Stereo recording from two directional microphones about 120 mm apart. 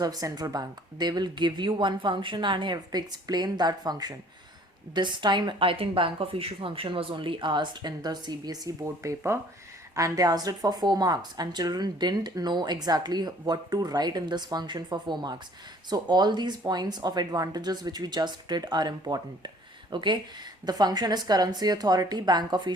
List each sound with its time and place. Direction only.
0.0 s speech: 30° right (ahead or behind)